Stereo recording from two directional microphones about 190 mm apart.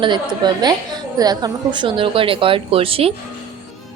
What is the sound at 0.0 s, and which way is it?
A woman's voice, 25° right (ahead or behind).